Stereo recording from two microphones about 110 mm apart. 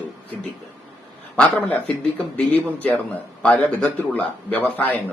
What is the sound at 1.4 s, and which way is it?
A man's voice, 15° left (ahead or behind).